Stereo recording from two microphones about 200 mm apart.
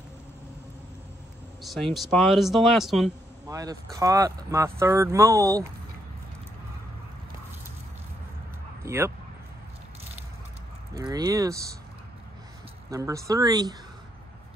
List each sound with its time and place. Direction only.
1.6 s speech: centre (ahead or behind)
3.4 s speech: 15° right (ahead or behind)
8.8 s a sound: 10° right (ahead or behind)
11.0 s speech: 20° right (ahead or behind)
12.9 s speech: 15° right (ahead or behind)